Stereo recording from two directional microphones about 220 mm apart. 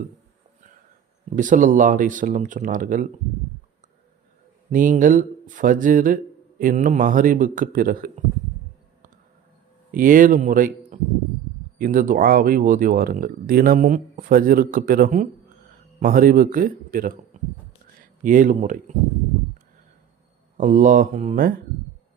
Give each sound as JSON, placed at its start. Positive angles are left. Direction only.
{"t": 1.4, "sound": "speech", "side_deg": -35}
{"t": 4.7, "sound": "speech", "side_deg": -35}
{"t": 9.9, "sound": "speech", "side_deg": -40}
{"t": 20.6, "sound": "speech", "side_deg": -35}